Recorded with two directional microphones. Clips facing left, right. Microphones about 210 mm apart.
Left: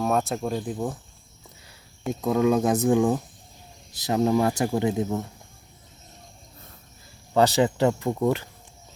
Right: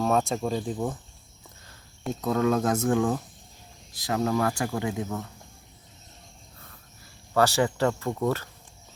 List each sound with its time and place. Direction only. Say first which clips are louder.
0.0 s speech: even; 5° left (ahead or behind)
2.2 s speech: left 3 dB; 15° left (ahead or behind)
7.3 s speech: left 3 dB; 20° left (ahead or behind)